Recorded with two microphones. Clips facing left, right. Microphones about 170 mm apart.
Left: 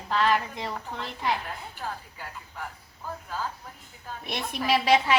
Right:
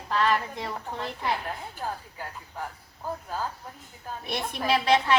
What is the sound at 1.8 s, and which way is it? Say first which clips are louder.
Speech: right 2 dB; 40° right (ahead or behind).